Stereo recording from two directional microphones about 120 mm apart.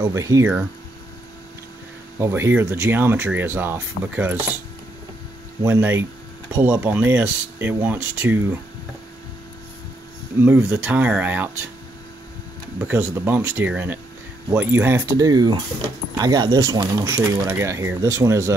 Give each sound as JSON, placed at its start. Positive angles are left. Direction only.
{"t": 0.0, "sound": "speech", "side_deg": -25}
{"t": 2.1, "sound": "speech", "side_deg": -20}
{"t": 5.6, "sound": "speech", "side_deg": -20}
{"t": 10.4, "sound": "speech", "side_deg": -15}
{"t": 12.8, "sound": "speech", "side_deg": -15}
{"t": 17.2, "sound": "speech", "side_deg": -20}